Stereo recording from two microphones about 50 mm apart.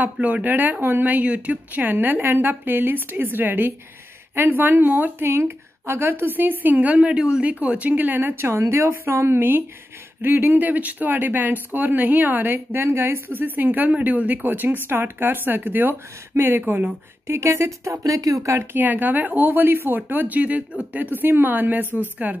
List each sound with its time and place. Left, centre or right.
0.0 s speech: right
8.5 s a woman's voice: right
12.8 s speech: right
17.3 s speech: right
18.7 s speech: right